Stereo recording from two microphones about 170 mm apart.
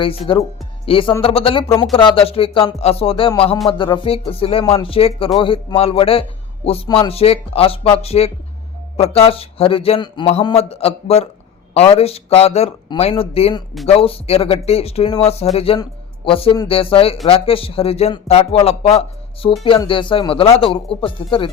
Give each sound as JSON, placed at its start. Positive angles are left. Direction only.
{"t": 0.0, "sound": "speech", "side_deg": 30}